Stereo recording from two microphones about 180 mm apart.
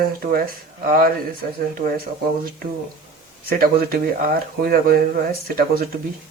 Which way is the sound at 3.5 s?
55° right (ahead or behind).